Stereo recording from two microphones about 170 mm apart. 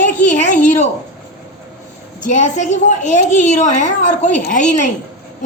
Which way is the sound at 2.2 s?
45° left (ahead or behind).